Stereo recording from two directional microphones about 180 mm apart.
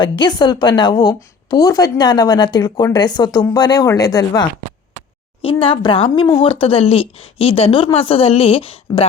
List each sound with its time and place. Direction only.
0.0 s a woman's voice: 25° left (ahead or behind)
5.4 s speech: 30° left (ahead or behind)